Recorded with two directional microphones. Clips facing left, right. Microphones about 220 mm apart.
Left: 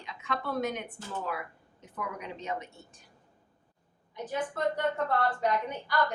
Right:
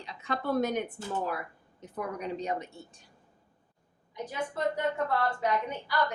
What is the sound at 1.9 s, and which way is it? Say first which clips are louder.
Speech: right 4 dB; 40° right (ahead or behind).